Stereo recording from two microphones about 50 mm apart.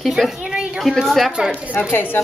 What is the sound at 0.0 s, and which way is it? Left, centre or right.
Speech, centre.